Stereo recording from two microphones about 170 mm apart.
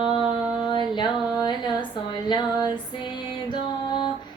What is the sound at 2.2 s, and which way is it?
Music, 25° left (ahead or behind).